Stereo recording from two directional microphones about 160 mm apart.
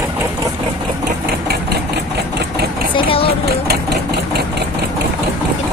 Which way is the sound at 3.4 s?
80° right.